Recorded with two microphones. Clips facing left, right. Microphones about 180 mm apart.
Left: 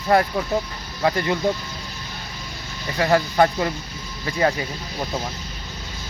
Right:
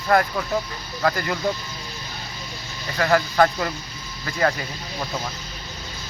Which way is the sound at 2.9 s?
20° left (ahead or behind).